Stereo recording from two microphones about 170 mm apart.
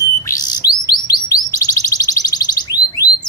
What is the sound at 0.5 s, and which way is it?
Bird, 25° left (ahead or behind).